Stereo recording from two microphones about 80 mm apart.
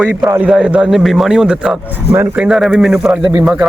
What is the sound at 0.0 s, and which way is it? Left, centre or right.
Speech, centre.